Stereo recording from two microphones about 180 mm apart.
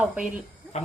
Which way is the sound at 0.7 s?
40° left (ahead or behind).